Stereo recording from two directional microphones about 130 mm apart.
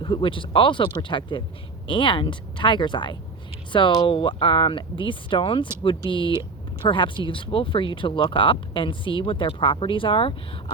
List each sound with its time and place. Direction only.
0.0 s speech: 40° left (ahead or behind)